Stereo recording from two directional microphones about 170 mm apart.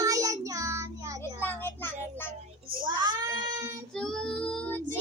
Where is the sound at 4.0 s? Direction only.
5° left (ahead or behind).